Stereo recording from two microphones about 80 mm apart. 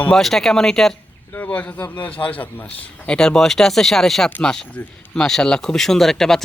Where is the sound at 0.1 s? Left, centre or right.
Centre.